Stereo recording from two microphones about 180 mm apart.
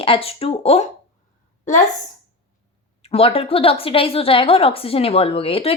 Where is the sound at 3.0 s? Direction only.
30° left (ahead or behind).